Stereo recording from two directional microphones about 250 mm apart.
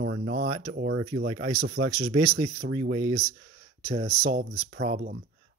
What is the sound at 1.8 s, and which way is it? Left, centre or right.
Speech, right.